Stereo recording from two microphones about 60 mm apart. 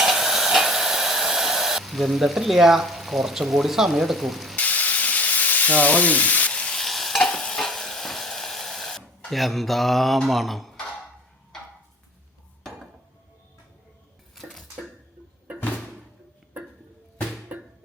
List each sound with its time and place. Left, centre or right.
0.0 s hair dryer: centre
4.5 s frying: left
6.8 s stir: centre
10.2 s speech: centre
17.5 s music: right